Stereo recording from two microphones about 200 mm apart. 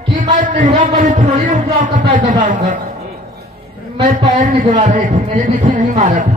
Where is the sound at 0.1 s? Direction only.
40° right (ahead or behind).